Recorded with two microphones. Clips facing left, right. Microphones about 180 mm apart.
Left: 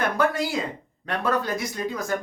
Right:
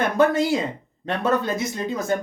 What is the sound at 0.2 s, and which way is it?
Speech, 25° right (ahead or behind).